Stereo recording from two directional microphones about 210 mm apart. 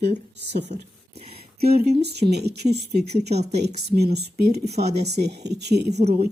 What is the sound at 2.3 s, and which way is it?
Speech, 50° right (ahead or behind).